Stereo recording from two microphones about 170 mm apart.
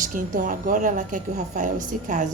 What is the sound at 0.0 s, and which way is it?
A woman's voice, 50° right (ahead or behind).